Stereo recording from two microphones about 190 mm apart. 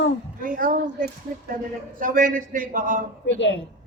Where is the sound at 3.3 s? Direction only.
70° left (ahead or behind).